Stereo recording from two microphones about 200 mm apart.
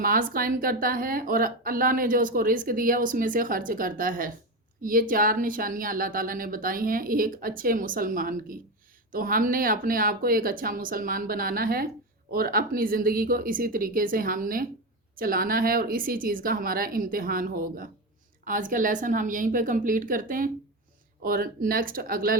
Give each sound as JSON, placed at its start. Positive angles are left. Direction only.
{"t": 0.0, "sound": "a woman's voice", "side_deg": -45}